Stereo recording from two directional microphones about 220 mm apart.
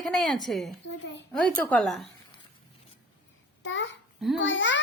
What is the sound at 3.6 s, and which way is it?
A child's voice, 55° left (ahead or behind).